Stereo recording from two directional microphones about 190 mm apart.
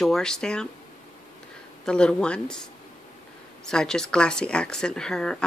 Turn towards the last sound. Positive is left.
turn(degrees=5)  # may be behind; listen again after turning